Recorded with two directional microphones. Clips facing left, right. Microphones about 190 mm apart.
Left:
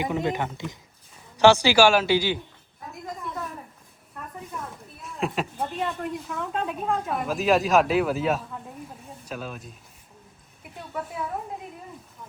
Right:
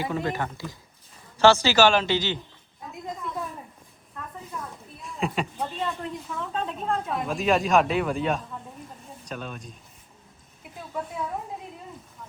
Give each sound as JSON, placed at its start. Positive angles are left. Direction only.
{"t": 0.0, "sound": "a man's voice", "side_deg": 20}
{"t": 5.0, "sound": "speech", "side_deg": 0}
{"t": 10.6, "sound": "a sound", "side_deg": 5}